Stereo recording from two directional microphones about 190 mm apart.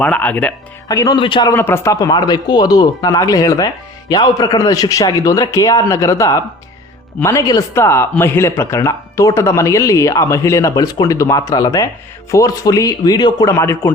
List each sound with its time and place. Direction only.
0.0 s speech: 10° left (ahead or behind)
0.9 s speech: 20° left (ahead or behind)
1.5 s speech: 10° left (ahead or behind)